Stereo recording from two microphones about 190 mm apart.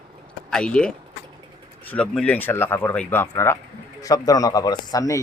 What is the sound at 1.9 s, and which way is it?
Speech, 5° left (ahead or behind).